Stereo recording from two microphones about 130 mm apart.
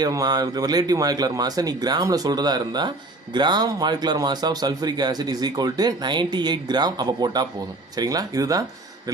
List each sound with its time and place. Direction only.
0.0 s a man's voice: 30° right (ahead or behind)